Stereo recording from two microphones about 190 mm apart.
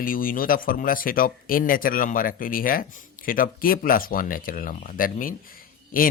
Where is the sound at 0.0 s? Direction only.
50° left (ahead or behind).